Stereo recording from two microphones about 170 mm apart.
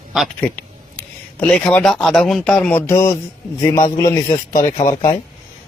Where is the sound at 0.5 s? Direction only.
5° left (ahead or behind).